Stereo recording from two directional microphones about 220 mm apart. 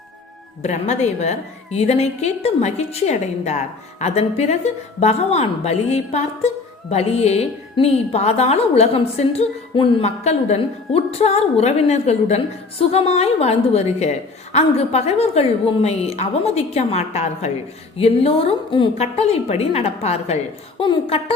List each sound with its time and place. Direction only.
0.6 s a woman's voice: 30° left (ahead or behind)